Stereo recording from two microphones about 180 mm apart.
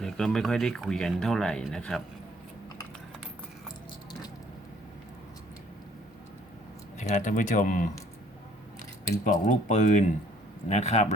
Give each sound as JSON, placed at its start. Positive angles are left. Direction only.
{"t": 0.0, "sound": "speech", "side_deg": 0}
{"t": 7.0, "sound": "speech", "side_deg": 45}
{"t": 9.2, "sound": "speech", "side_deg": 45}